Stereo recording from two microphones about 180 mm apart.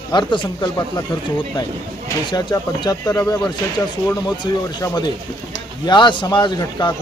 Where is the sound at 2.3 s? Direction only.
25° left (ahead or behind).